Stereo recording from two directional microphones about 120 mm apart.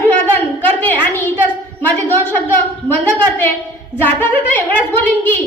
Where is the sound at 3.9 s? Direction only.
20° left (ahead or behind).